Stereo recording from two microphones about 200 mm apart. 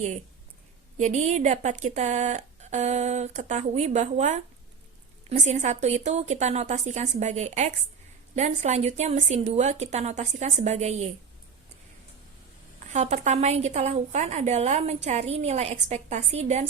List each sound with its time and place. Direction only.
0.9 s a woman's voice: 35° right (ahead or behind)
12.9 s a woman's voice: 35° right (ahead or behind)